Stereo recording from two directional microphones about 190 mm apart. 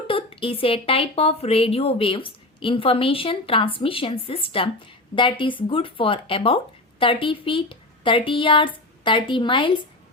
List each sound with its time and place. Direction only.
0.1 s a woman's voice: 30° left (ahead or behind)